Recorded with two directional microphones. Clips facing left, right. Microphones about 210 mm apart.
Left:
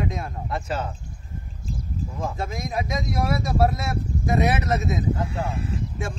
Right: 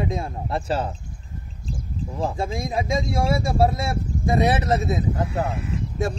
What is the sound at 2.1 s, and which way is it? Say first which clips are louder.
Speech: right 5 dB; 30° right (ahead or behind).